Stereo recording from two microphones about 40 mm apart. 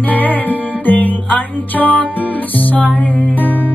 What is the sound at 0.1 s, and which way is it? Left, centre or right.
Music, left.